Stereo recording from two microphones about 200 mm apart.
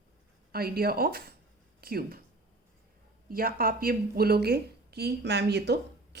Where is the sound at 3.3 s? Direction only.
45° right (ahead or behind).